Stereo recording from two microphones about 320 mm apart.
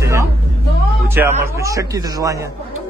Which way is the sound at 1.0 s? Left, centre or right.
Centre.